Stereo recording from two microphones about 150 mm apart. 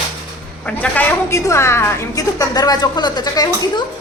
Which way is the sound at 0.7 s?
10° left (ahead or behind).